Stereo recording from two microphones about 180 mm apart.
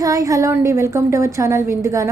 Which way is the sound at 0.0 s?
20° right (ahead or behind).